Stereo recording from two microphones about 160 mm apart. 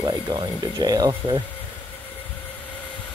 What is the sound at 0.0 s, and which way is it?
Speech, 20° right (ahead or behind).